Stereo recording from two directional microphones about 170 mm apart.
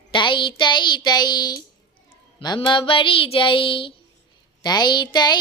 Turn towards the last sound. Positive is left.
turn(degrees=25)  # may be behind; listen again after turning